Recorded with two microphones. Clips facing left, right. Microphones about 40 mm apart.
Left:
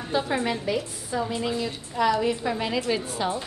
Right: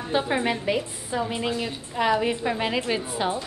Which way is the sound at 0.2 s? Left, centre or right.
Right.